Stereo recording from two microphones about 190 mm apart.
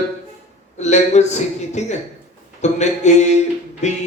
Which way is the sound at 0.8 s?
35° left (ahead or behind).